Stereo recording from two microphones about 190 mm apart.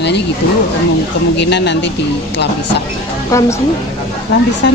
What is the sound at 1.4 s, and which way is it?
Speech, 65° left (ahead or behind).